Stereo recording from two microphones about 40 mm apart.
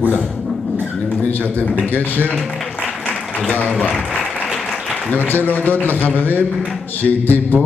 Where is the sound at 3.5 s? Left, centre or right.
Left.